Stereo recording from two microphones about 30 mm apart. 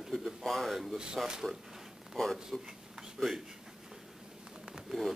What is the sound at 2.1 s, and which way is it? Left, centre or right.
Speech, centre.